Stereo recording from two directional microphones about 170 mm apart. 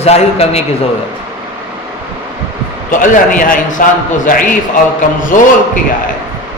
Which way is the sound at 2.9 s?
50° left (ahead or behind).